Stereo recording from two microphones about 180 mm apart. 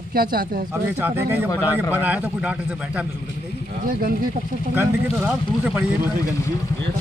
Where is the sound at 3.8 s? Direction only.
50° right (ahead or behind).